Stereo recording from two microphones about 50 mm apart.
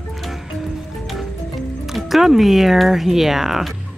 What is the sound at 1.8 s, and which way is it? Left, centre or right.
Speech, centre.